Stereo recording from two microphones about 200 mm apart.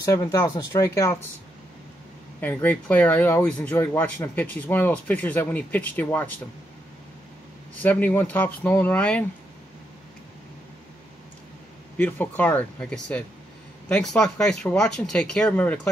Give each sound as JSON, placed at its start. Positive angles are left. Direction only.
{"t": 0.0, "sound": "speech", "side_deg": 15}
{"t": 2.4, "sound": "speech", "side_deg": 10}
{"t": 7.8, "sound": "speech", "side_deg": 10}
{"t": 12.0, "sound": "speech", "side_deg": 10}